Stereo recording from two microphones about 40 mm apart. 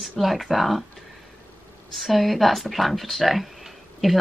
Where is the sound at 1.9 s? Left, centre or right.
Centre.